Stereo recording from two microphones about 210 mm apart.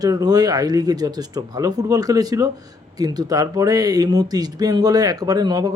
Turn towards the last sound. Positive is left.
turn(degrees=-20)  # may be behind; listen again after turning